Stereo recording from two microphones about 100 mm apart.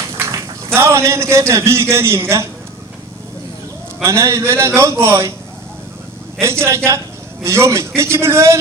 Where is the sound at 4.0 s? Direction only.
30° right (ahead or behind).